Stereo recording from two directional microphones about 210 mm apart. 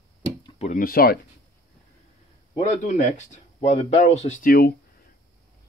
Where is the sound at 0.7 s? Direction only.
45° left (ahead or behind).